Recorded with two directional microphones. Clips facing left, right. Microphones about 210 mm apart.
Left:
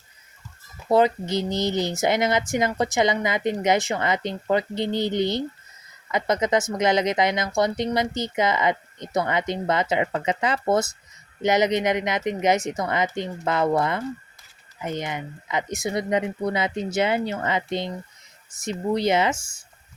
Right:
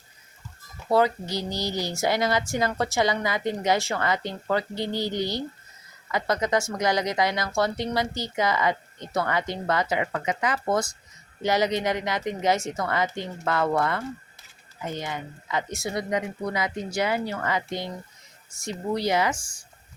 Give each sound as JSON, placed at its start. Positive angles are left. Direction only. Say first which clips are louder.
{"t": 0.9, "sound": "speech", "louder": "left 3 dB", "side_deg": 20}